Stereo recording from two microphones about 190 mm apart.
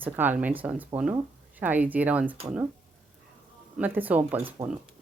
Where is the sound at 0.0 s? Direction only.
10° right (ahead or behind).